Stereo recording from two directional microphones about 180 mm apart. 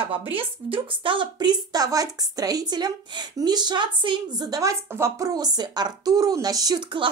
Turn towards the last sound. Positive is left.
turn(degrees=-25)  # may be behind; listen again after turning